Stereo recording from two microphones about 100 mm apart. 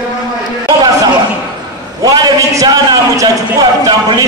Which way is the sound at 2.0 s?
40° right (ahead or behind).